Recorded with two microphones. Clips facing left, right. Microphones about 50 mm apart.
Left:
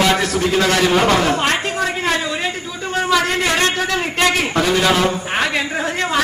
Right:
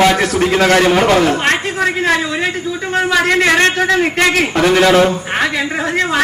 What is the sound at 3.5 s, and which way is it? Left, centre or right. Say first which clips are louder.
A man's voice: right 6 dB; right.